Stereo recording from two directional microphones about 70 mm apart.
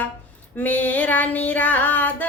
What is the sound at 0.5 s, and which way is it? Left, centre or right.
Female singing, left.